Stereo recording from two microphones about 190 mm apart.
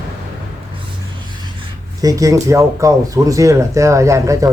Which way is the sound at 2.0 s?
15° right (ahead or behind).